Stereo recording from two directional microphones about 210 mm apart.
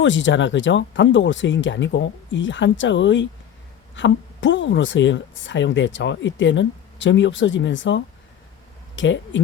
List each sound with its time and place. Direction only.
0.0 s speech: 60° left (ahead or behind)